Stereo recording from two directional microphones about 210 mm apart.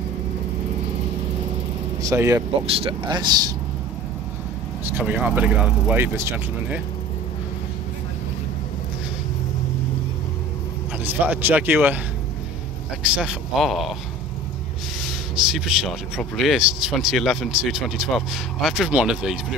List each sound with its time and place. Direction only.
2.0 s speech: 15° right (ahead or behind)
2.6 s speech: 25° right (ahead or behind)
4.8 s speech: 10° right (ahead or behind)
11.1 s speech: 10° right (ahead or behind)
13.0 s speech: 5° right (ahead or behind)
15.0 s speech: 5° right (ahead or behind)